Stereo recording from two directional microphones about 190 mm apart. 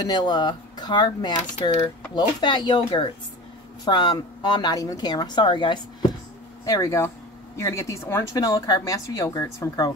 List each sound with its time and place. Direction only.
0.0 s a woman's voice: 20° left (ahead or behind)